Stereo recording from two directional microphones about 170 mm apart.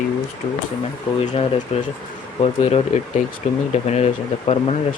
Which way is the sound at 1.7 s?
35° left (ahead or behind).